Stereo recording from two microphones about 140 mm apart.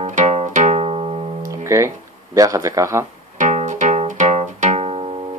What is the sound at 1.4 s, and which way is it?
Music, 20° right (ahead or behind).